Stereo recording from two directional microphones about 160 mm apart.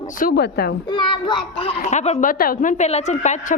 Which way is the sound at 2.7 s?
45° left (ahead or behind).